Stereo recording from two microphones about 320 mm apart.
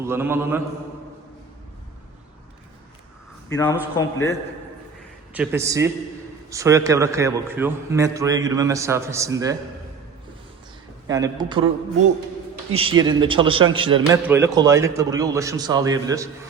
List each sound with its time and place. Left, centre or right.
0.0 s a man's voice: centre
3.5 s a man's voice: centre
5.3 s a man's voice: centre
11.1 s a man's voice: centre
12.7 s a man's voice: centre